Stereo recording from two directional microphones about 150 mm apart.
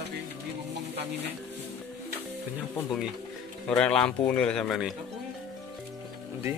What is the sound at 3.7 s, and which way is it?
A man's voice, 5° left (ahead or behind).